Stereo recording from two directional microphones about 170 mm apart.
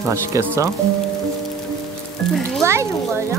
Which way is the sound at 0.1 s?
15° right (ahead or behind).